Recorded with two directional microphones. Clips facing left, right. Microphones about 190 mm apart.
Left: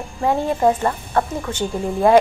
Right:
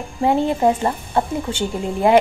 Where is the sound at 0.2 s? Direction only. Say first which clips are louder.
Right 1 dB; 20° right (ahead or behind).